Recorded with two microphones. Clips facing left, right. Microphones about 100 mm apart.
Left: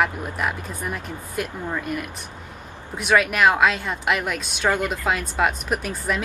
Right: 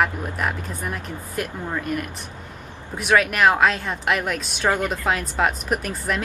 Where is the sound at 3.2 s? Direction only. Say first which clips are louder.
Even; centre (ahead or behind).